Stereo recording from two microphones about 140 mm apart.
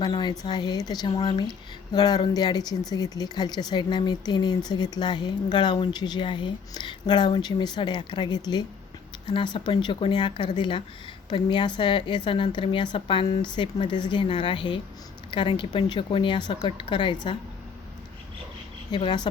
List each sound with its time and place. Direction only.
0.0 s speech: 30° left (ahead or behind)
18.9 s speech: 30° left (ahead or behind)